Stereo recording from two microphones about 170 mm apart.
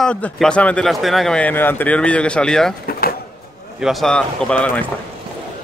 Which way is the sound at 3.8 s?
Centre (ahead or behind).